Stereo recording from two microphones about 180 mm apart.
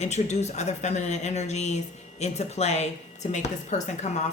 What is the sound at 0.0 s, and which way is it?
Speech, 40° left (ahead or behind).